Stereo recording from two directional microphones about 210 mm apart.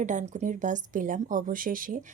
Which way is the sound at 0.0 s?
35° right (ahead or behind).